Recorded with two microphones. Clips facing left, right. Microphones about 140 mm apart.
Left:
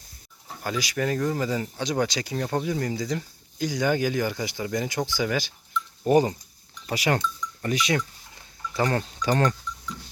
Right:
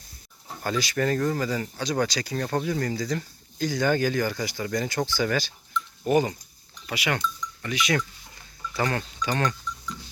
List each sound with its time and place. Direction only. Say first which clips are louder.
0.6 s speech: right 2 dB; 10° left (ahead or behind)
6.1 s speech: left 3 dB; 30° left (ahead or behind)
8.7 s speech: left 2 dB; 30° left (ahead or behind)